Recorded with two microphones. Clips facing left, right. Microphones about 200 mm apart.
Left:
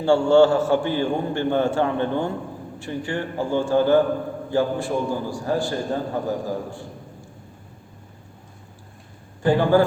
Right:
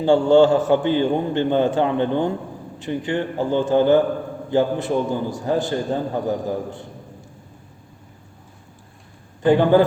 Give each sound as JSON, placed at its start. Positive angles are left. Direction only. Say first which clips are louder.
{"t": 0.0, "sound": "a man's voice", "louder": "right 2 dB", "side_deg": -15}
{"t": 9.4, "sound": "a man's voice", "louder": "right 3 dB", "side_deg": -20}